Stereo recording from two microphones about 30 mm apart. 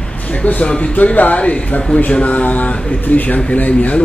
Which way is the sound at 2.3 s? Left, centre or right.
Left.